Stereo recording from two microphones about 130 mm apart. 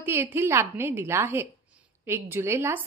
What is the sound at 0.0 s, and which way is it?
A woman's voice, 20° right (ahead or behind).